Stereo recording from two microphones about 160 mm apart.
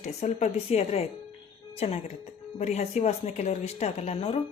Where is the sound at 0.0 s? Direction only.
45° left (ahead or behind).